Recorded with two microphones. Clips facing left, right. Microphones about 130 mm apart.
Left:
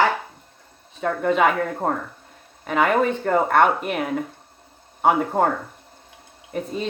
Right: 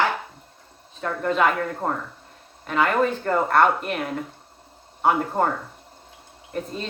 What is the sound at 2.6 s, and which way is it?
Speech, 55° left (ahead or behind).